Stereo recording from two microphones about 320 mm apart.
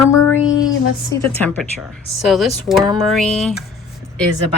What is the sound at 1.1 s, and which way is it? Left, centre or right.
A woman's voice, centre.